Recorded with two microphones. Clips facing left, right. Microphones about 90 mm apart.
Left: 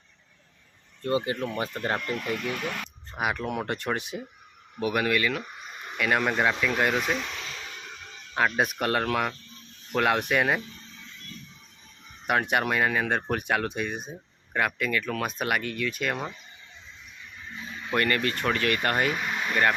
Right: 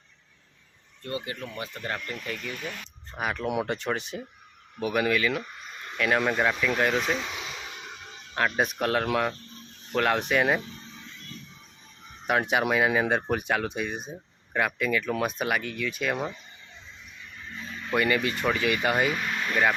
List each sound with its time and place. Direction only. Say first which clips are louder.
1.0 s speech: left 7 dB; 30° left (ahead or behind)
1.5 s speech: left 5 dB; 40° left (ahead or behind)
2.0 s speech: left 5 dB; 65° left (ahead or behind)
3.2 s speech: left 2 dB; 5° left (ahead or behind)
3.4 s speech: right 2 dB; 5° right (ahead or behind); by 6.1 s 10° left (ahead or behind)
6.1 s speech: even; centre (ahead or behind); by 8.2 s 15° right (ahead or behind)
8.4 s speech: left 1 dB; 5° left (ahead or behind)
12.2 s speech: even; centre (ahead or behind)
17.9 s speech: right 1 dB; 5° right (ahead or behind)
19.1 s a sound: even; 10° left (ahead or behind)